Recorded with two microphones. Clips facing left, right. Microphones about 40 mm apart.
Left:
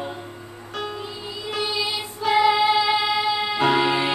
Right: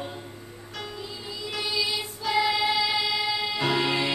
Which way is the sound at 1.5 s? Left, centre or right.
Left.